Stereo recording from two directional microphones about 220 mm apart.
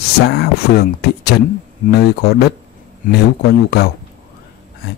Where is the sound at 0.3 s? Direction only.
45° left (ahead or behind).